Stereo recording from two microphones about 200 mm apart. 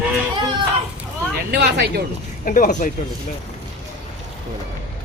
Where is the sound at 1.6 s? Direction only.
55° right (ahead or behind).